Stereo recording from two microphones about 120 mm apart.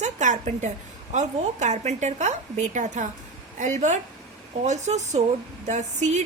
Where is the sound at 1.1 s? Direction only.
80° right.